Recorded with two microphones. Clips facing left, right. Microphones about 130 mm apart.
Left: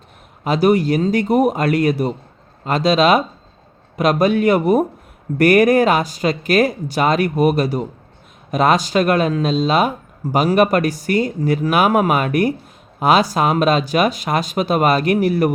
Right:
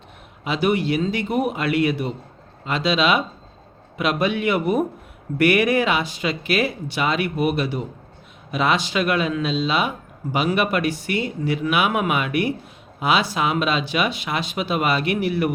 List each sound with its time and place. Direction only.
0.4 s speech: 40° left (ahead or behind)